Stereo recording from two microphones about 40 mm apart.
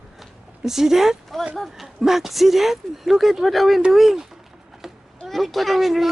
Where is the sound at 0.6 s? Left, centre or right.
Centre.